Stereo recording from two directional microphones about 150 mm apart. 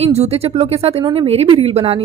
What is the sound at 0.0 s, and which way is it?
A woman's voice, 45° right (ahead or behind).